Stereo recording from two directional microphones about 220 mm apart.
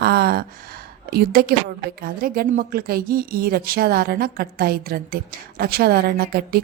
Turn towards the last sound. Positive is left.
turn(degrees=-45)  # may be behind; listen again after turning